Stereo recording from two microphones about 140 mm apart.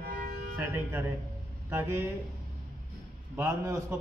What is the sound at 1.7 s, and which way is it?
Speech, 20° right (ahead or behind).